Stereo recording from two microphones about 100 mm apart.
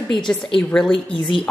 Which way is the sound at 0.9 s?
60° left (ahead or behind).